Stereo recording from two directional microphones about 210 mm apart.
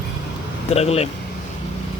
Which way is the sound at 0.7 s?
30° left (ahead or behind).